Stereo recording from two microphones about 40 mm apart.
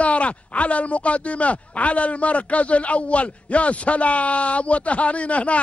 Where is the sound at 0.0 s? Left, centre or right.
Left.